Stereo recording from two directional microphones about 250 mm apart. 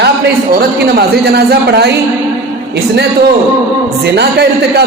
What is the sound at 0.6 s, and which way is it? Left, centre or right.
A man's voice, right.